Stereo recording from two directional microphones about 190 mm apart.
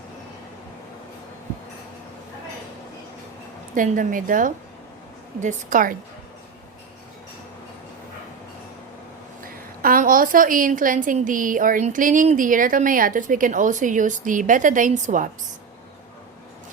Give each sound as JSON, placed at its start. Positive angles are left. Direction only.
{"t": 3.8, "sound": "a woman's voice", "side_deg": -45}
{"t": 9.8, "sound": "a woman's voice", "side_deg": -45}